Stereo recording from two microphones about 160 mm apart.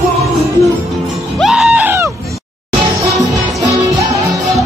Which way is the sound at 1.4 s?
5° right (ahead or behind).